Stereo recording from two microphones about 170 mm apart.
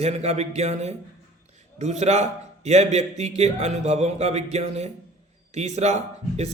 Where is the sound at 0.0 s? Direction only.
40° right (ahead or behind).